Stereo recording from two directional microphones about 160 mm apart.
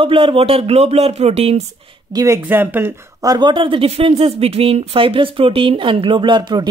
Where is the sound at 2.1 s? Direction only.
20° right (ahead or behind).